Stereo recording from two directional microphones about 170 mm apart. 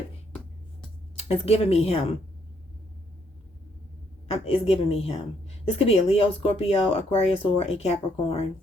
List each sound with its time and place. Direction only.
1.1 s speech: 35° left (ahead or behind)
4.3 s a woman's voice: 35° left (ahead or behind)